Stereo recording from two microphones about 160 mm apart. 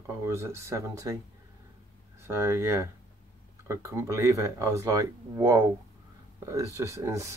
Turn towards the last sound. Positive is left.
turn(degrees=-20)  # may be behind; listen again after turning